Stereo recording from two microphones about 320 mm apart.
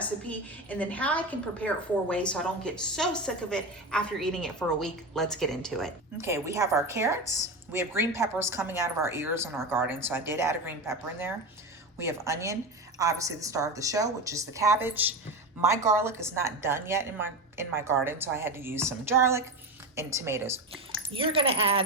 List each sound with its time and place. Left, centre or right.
0.3 s a woman's voice: centre
6.2 s a woman's voice: centre